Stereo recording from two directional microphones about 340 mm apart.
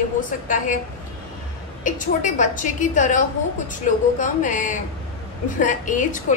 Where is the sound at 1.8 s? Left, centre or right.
Left.